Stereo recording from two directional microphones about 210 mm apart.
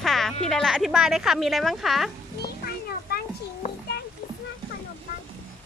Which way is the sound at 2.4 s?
45° left (ahead or behind).